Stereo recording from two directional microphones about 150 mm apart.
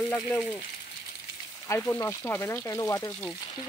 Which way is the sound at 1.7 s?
20° left (ahead or behind).